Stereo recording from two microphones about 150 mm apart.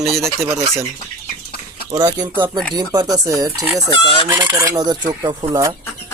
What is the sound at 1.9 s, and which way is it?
Speech, 25° right (ahead or behind).